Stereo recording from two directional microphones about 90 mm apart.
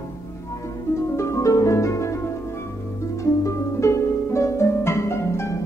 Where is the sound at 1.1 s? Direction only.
35° left (ahead or behind).